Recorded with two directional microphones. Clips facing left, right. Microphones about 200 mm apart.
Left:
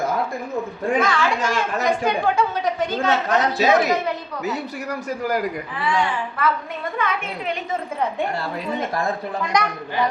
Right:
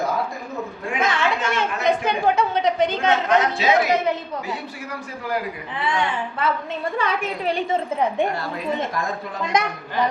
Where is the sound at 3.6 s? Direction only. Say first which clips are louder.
Left 3 dB; 40° left (ahead or behind).